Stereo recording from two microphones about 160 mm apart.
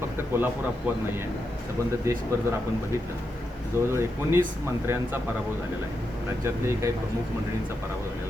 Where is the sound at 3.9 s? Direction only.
15° right (ahead or behind).